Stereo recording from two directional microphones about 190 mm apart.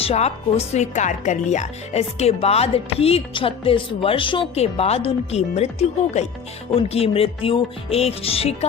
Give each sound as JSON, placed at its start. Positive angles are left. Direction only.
{"t": 0.0, "sound": "speech", "side_deg": 35}
{"t": 6.7, "sound": "speech", "side_deg": 30}